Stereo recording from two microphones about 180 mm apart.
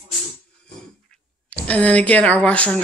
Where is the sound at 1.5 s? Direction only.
5° left (ahead or behind).